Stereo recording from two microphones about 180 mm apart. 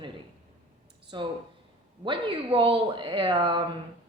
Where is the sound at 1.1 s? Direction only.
25° right (ahead or behind).